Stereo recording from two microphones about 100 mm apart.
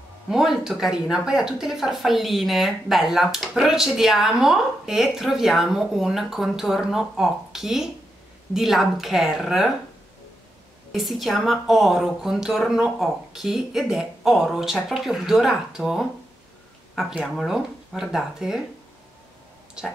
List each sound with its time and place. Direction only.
0.3 s speech: 5° right (ahead or behind)
10.9 s speech: centre (ahead or behind)
17.1 s speech: 5° right (ahead or behind)
19.8 s speech: 5° right (ahead or behind)